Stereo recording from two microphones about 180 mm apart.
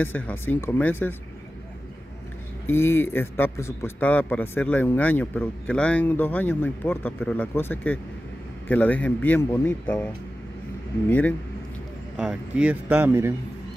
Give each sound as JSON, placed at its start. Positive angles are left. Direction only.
{"t": 0.0, "sound": "a man's voice", "side_deg": 10}
{"t": 2.6, "sound": "a man's voice", "side_deg": 15}
{"t": 12.2, "sound": "speech", "side_deg": -5}